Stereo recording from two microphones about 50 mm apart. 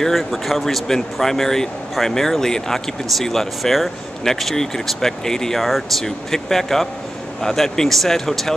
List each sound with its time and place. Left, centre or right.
0.0 s speech: centre
5.7 s speech: centre